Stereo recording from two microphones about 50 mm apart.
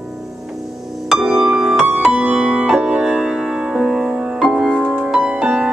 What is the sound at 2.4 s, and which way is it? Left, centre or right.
Music, right.